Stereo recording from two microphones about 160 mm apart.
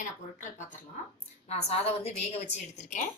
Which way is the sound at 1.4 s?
40° left (ahead or behind).